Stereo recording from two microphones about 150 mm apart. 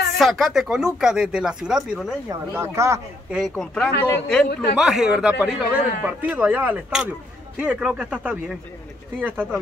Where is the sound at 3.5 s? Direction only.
5° left (ahead or behind); by 9.4 s 10° right (ahead or behind).